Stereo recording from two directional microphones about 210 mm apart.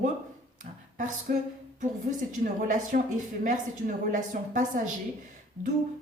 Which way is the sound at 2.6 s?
40° right (ahead or behind).